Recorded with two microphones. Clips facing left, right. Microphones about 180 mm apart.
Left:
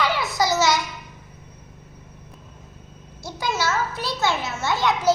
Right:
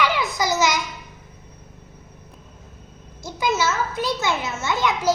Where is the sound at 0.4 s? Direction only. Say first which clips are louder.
Left 1 dB; 15° right (ahead or behind).